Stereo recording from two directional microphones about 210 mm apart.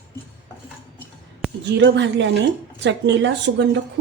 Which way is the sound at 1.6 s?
55° right (ahead or behind).